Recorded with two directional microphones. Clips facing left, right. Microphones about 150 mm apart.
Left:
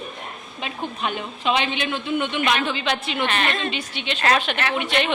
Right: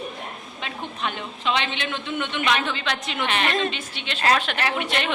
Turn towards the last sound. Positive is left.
turn(degrees=0)  # may be behind; listen again after turning